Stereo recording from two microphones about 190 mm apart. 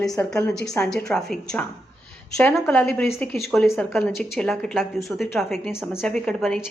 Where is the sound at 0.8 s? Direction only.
5° left (ahead or behind).